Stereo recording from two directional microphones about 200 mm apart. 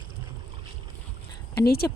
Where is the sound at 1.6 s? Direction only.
50° left (ahead or behind).